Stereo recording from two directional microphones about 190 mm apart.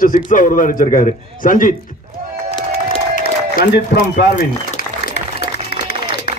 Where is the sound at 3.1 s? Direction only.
50° left (ahead or behind).